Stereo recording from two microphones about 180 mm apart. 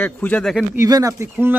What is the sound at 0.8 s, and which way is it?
Speech, 20° right (ahead or behind).